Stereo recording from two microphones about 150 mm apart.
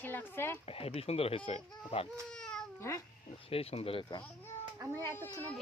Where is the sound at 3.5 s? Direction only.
40° left (ahead or behind).